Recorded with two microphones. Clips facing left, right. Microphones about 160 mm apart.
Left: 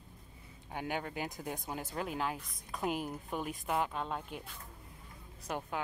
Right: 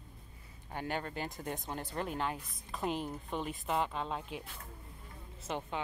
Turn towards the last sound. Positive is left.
turn(degrees=5)  # may be behind; listen again after turning